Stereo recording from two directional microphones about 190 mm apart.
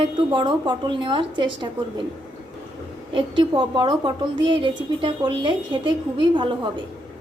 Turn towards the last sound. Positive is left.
turn(degrees=-25)  # may be behind; listen again after turning